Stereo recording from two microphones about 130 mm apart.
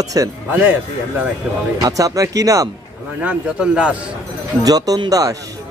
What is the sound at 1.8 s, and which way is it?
Speech, 25° right (ahead or behind).